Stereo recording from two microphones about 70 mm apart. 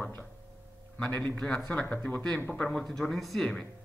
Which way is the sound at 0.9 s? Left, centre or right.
Centre.